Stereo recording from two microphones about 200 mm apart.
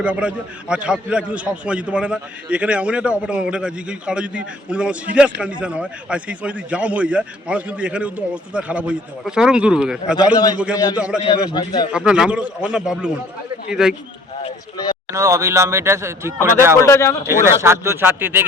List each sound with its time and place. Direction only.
0.0 s a man's voice: 5° right (ahead or behind)
11.4 s speech: 20° left (ahead or behind)
11.9 s a man's voice: 5° right (ahead or behind)
14.4 s speech: 20° left (ahead or behind)
15.1 s speech: 15° right (ahead or behind)
16.7 s speech: 15° left (ahead or behind)
17.2 s speech: 15° right (ahead or behind)